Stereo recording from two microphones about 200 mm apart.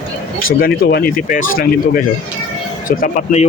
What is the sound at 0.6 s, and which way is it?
Speech, 50° left (ahead or behind).